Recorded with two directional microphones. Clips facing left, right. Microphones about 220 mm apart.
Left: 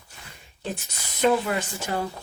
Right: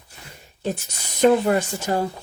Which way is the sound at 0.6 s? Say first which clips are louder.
Right 6 dB; 45° right (ahead or behind).